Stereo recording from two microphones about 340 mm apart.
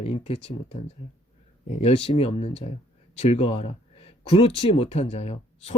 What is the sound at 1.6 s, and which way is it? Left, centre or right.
Speech, centre.